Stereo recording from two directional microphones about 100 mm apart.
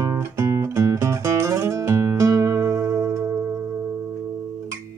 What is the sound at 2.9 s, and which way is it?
Music, 10° right (ahead or behind).